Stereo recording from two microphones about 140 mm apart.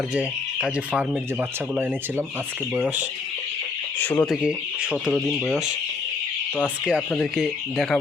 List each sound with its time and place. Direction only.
0.1 s speech: 10° right (ahead or behind)
4.0 s speech: 10° left (ahead or behind)
4.3 s speech: 5° right (ahead or behind)